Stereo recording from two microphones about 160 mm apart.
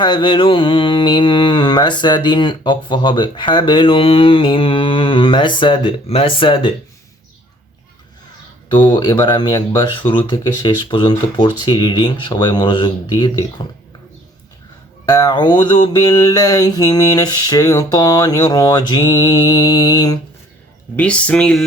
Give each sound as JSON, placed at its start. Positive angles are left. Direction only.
{"t": 0.0, "sound": "mantra", "side_deg": 30}
{"t": 8.7, "sound": "mantra", "side_deg": 25}
{"t": 15.0, "sound": "mantra", "side_deg": 25}
{"t": 20.9, "sound": "speech", "side_deg": 10}